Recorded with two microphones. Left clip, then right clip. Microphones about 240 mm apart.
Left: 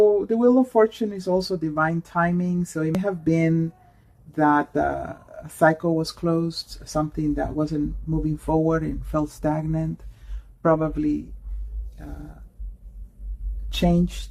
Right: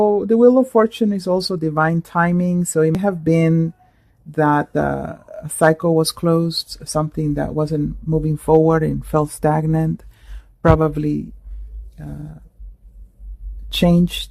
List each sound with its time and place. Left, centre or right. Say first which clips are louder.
0.0 s speech: right 5 dB; right
13.7 s speech: right 6 dB; right